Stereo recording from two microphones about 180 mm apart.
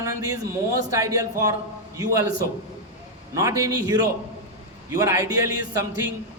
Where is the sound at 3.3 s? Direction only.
15° right (ahead or behind).